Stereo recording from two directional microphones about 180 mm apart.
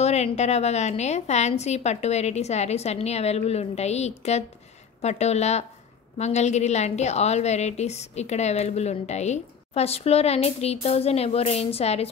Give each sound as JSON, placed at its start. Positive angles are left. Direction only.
{"t": 0.0, "sound": "a woman's voice", "side_deg": 35}